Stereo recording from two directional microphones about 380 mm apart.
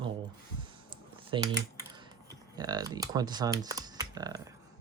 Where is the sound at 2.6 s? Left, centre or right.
Centre.